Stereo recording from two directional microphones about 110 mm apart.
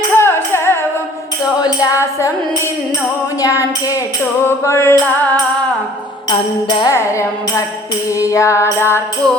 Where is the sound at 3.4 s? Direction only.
30° left (ahead or behind).